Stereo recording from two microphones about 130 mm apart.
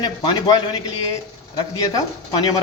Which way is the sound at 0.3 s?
35° left (ahead or behind).